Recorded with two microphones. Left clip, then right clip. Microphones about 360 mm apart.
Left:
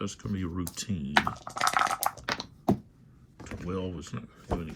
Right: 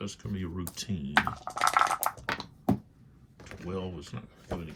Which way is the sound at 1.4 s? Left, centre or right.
Centre.